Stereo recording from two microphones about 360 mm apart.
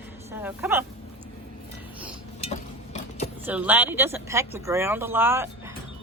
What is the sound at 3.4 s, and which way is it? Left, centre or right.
A man's voice, centre.